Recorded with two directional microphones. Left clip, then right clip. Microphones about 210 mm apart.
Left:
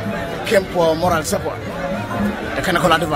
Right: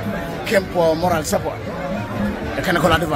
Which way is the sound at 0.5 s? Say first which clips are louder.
Left 1 dB; 5° left (ahead or behind).